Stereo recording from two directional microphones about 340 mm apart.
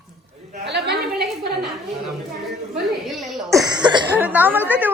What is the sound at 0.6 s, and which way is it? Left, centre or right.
Speech, right.